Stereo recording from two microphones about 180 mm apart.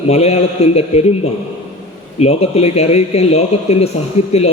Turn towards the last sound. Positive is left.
turn(degrees=35)  # may be behind; listen again after turning